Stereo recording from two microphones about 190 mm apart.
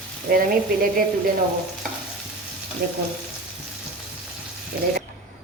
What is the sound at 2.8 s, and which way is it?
Speech, 50° right (ahead or behind).